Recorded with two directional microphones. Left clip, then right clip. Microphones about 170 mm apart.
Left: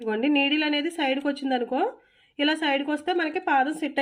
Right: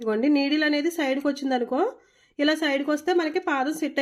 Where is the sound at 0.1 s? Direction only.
20° right (ahead or behind).